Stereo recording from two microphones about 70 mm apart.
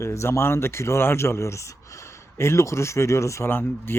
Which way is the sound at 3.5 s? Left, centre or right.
Left.